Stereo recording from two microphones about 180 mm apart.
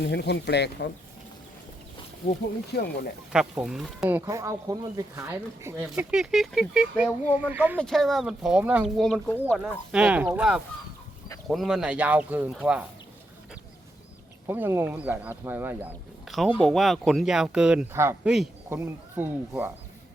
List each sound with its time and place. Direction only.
0.0 s speech: 70° left (ahead or behind)
2.7 s speech: 65° left (ahead or behind)
3.3 s speech: 5° right (ahead or behind)
4.3 s speech: 15° right (ahead or behind)
7.8 s speech: centre (ahead or behind)
9.9 s speech: 5° right (ahead or behind)
14.4 s speech: 10° right (ahead or behind)